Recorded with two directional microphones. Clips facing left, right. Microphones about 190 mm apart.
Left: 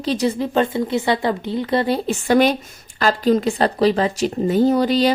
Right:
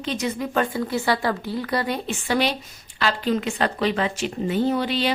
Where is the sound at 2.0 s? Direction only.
45° left (ahead or behind).